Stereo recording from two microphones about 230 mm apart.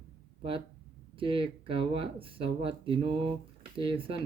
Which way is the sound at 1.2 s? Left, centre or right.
Right.